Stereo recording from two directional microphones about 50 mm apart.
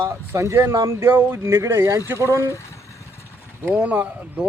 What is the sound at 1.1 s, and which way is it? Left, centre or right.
Speech, right.